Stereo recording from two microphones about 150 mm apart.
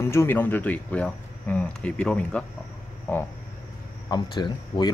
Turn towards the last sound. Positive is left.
turn(degrees=30)  # may be behind; listen again after turning